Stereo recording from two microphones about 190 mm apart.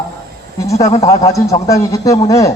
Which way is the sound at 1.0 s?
15° left (ahead or behind).